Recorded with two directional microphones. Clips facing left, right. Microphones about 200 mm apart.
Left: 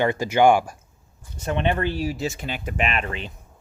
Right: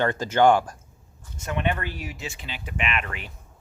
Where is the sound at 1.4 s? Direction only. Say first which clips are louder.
Left 4 dB; 30° left (ahead or behind).